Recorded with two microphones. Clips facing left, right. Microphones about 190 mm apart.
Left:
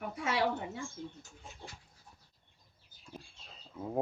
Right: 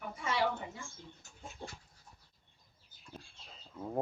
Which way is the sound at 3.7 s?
5° left (ahead or behind).